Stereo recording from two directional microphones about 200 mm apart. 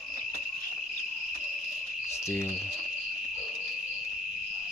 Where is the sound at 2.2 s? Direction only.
15° left (ahead or behind).